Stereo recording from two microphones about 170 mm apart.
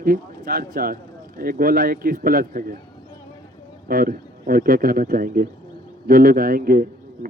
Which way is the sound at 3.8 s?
55° right (ahead or behind).